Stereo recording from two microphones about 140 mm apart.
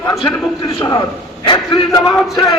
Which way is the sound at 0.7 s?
30° left (ahead or behind).